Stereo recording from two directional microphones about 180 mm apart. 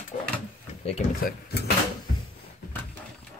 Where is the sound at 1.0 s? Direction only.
45° left (ahead or behind).